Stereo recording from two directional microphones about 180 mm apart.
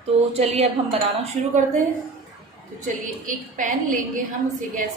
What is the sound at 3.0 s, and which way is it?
A woman's voice, 45° right (ahead or behind).